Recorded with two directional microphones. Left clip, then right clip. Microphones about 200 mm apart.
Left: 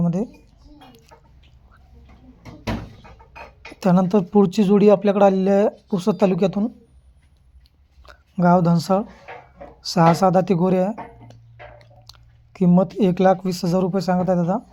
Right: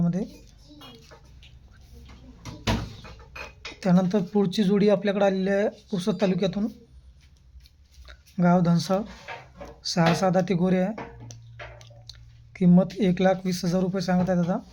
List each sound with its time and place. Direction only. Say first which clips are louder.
0.0 s speech: left 5 dB; 25° left (ahead or behind)
3.8 s speech: left 6 dB; 25° left (ahead or behind)
8.0 s speech: left 6 dB; 25° left (ahead or behind)